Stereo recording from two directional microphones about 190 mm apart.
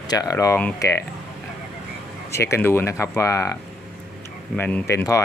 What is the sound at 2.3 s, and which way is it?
Speech, 15° left (ahead or behind).